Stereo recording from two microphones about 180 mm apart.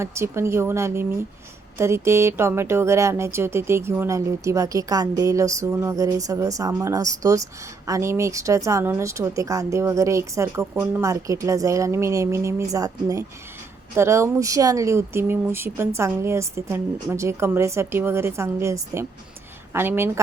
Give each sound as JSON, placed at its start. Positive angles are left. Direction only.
{"t": 0.0, "sound": "speech", "side_deg": -15}